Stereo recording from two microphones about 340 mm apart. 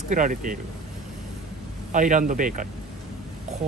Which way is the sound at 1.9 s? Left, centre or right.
Right.